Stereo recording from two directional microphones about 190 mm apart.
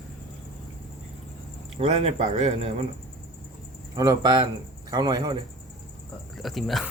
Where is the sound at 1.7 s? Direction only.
30° right (ahead or behind).